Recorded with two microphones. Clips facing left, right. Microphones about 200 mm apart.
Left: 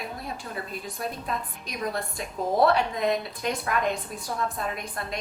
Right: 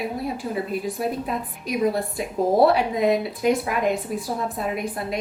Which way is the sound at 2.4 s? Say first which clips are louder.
Right 5 dB; 30° right (ahead or behind).